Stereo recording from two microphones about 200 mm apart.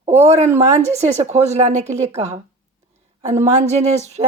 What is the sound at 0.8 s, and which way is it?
A woman's voice, 35° right (ahead or behind).